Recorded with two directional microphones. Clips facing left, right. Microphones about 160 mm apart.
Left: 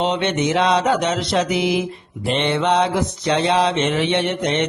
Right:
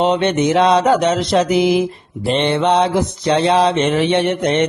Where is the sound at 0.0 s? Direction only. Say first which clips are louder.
Right 5 dB; 40° right (ahead or behind).